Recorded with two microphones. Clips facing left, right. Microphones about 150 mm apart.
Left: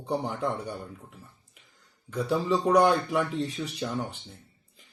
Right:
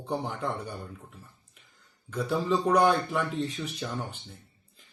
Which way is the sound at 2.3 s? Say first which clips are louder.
Left 1 dB; 10° left (ahead or behind).